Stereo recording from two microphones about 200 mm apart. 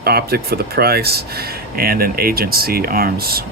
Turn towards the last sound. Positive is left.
turn(degrees=-50)  # may be behind; listen again after turning